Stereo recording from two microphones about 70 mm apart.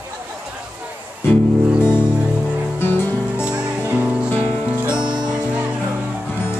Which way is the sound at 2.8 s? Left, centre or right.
Left.